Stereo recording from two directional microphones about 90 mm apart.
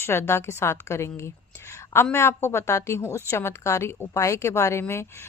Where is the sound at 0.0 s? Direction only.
30° left (ahead or behind).